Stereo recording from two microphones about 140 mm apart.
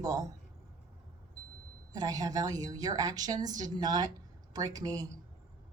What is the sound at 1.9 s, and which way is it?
Speech, 25° right (ahead or behind).